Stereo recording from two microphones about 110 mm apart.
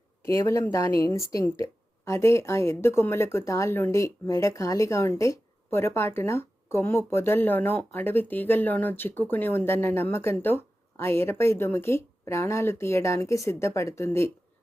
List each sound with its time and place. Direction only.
0.3 s speech: 25° left (ahead or behind)